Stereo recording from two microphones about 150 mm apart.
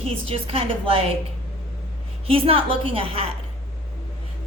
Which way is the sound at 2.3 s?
40° right (ahead or behind).